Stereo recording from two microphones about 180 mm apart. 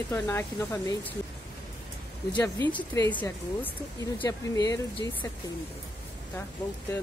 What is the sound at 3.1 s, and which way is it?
Speech, 10° left (ahead or behind).